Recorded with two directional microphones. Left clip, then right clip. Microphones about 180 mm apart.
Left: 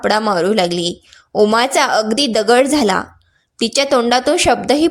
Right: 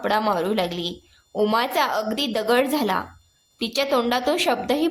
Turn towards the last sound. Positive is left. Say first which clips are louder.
# left 8 dB
turn(degrees=35)  # may be behind; listen again after turning